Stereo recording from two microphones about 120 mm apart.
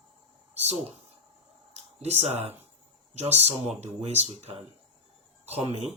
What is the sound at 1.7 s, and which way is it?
Speech, 65° right (ahead or behind).